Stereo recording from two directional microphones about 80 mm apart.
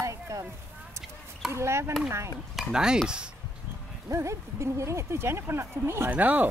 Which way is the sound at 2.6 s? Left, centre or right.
Centre.